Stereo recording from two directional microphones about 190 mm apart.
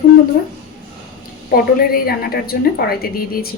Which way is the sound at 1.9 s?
50° left (ahead or behind).